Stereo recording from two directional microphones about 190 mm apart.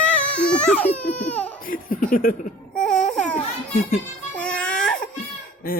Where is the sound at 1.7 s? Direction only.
45° left (ahead or behind).